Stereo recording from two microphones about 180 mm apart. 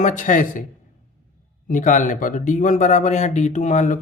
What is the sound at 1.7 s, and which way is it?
Speech, 45° left (ahead or behind).